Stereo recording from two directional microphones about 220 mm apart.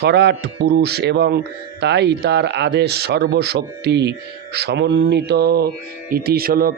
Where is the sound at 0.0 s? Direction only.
50° right (ahead or behind).